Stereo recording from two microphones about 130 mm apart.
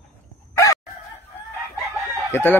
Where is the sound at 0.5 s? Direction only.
25° left (ahead or behind).